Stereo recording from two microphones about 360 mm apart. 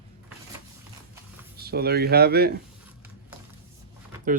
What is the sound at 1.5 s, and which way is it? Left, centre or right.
Speech, right.